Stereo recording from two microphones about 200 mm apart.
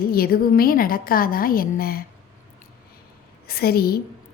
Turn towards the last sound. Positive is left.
turn(degrees=50)  # may be behind; listen again after turning